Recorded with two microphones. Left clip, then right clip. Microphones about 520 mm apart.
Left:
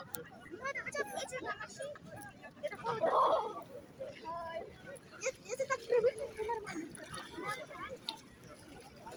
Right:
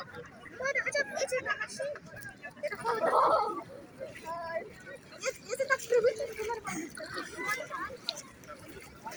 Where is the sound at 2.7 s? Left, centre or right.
Left.